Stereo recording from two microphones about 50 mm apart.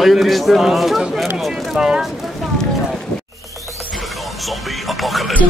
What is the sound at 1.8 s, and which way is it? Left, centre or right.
Speech, centre.